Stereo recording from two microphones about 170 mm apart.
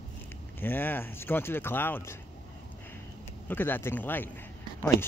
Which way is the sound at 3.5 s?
10° left (ahead or behind).